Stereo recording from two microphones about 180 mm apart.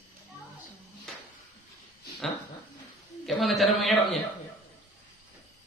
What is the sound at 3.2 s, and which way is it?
Speech, centre (ahead or behind).